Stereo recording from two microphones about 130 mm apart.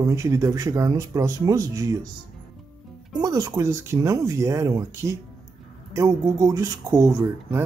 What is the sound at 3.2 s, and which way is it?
Speech, 30° right (ahead or behind).